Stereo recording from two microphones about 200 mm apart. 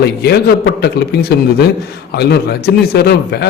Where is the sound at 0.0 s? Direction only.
55° left (ahead or behind).